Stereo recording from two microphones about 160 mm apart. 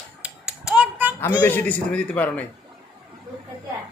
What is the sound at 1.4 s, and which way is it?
A man's voice, 10° left (ahead or behind).